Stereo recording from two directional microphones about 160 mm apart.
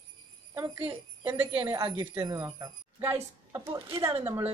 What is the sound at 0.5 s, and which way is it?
A woman's voice, 10° right (ahead or behind).